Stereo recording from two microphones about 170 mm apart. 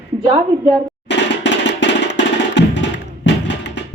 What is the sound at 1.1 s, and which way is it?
Music, 90° left.